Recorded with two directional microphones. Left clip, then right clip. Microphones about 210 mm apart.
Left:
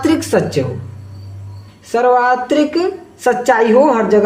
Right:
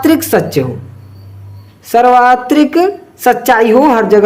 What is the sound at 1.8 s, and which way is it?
A woman's voice, 30° right (ahead or behind).